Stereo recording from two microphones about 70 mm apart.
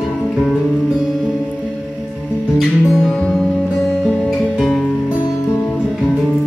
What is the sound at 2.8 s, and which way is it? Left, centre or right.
Music, centre.